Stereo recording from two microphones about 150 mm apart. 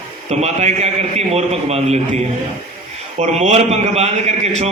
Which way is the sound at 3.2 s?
45° right (ahead or behind).